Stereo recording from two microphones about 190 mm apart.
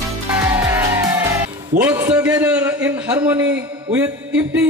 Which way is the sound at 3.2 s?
10° right (ahead or behind).